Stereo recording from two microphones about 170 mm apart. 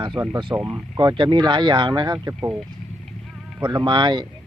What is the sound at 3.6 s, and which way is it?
Speech, 25° right (ahead or behind).